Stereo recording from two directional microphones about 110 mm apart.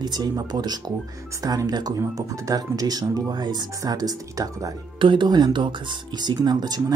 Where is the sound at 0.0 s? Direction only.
40° right (ahead or behind).